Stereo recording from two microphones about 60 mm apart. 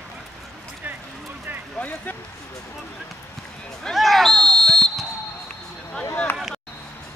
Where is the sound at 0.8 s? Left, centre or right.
Right.